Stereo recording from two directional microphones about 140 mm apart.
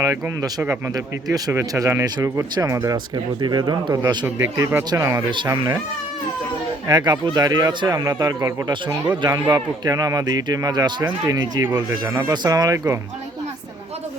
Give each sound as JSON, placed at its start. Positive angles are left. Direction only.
{"t": 0.0, "sound": "a man's voice", "side_deg": -25}
{"t": 6.8, "sound": "a man's voice", "side_deg": -30}
{"t": 11.6, "sound": "a man's voice", "side_deg": -20}